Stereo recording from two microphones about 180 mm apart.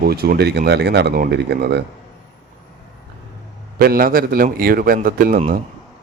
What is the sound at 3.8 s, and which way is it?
A man's voice, 55° right (ahead or behind).